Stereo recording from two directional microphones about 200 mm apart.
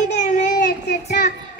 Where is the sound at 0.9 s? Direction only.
55° left (ahead or behind).